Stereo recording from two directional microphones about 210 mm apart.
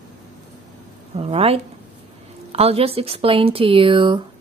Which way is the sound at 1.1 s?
25° right (ahead or behind).